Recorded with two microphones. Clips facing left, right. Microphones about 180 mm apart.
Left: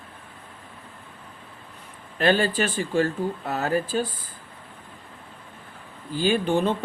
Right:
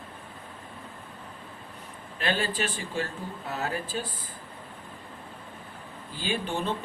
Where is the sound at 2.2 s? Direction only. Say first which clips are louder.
Left 8 dB; 55° left (ahead or behind).